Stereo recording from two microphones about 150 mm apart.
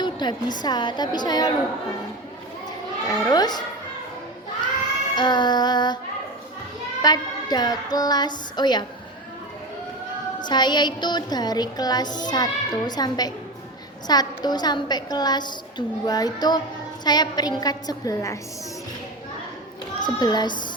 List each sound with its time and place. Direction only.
0.0 s speech: 30° left (ahead or behind)
3.1 s speech: 25° left (ahead or behind)
5.1 s speech: 30° left (ahead or behind)
7.0 s speech: 25° left (ahead or behind)
10.4 s speech: 30° left (ahead or behind)
20.0 s speech: 30° left (ahead or behind)